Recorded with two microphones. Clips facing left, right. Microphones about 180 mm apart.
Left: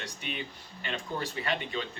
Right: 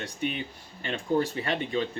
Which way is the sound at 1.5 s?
45° right (ahead or behind).